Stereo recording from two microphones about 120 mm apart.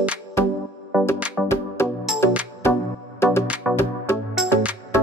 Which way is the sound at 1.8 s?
20° left (ahead or behind).